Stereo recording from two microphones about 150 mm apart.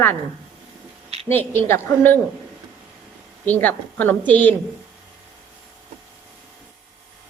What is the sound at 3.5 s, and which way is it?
A woman's voice, 10° left (ahead or behind).